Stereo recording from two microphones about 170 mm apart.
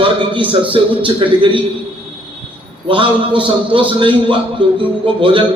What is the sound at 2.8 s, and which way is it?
A man's voice, 30° right (ahead or behind).